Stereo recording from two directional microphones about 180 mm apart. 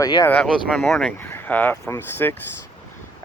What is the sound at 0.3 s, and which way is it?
Speech, centre (ahead or behind).